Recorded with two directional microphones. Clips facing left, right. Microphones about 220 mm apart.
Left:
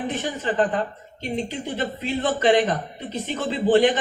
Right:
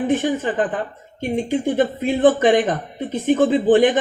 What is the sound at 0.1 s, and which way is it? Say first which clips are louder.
A man's voice: right 7 dB; 50° right (ahead or behind).